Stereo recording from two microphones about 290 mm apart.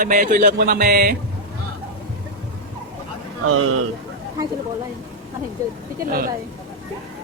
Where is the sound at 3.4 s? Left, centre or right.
Right.